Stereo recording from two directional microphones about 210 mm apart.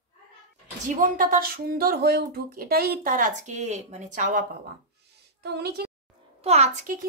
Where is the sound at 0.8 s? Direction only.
40° right (ahead or behind).